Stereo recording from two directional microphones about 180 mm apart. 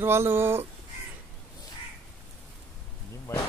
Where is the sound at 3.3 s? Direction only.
15° left (ahead or behind).